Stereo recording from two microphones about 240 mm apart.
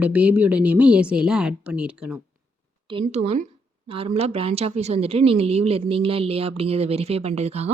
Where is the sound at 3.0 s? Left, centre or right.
Right.